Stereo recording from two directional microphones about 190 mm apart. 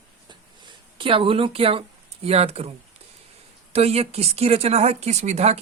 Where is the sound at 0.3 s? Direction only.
25° right (ahead or behind).